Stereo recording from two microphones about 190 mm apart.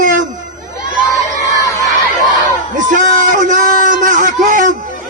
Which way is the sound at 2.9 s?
40° right (ahead or behind).